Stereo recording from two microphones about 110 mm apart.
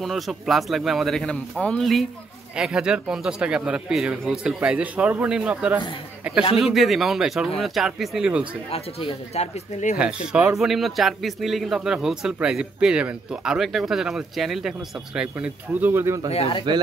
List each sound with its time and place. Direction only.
0.0 s a man's voice: centre (ahead or behind)
8.6 s speech: 65° left (ahead or behind)
9.9 s speech: 10° right (ahead or behind)
16.3 s speech: 60° left (ahead or behind)